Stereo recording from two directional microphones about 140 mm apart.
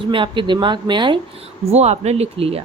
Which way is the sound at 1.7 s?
50° right (ahead or behind).